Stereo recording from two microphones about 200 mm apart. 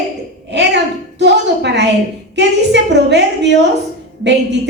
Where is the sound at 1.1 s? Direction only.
60° right (ahead or behind).